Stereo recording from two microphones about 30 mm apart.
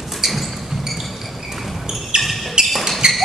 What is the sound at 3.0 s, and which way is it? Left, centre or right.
Music, right.